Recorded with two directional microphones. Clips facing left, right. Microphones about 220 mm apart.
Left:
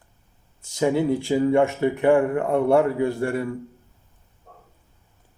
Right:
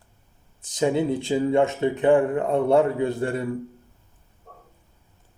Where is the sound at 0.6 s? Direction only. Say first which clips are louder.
Left 1 dB; 20° right (ahead or behind).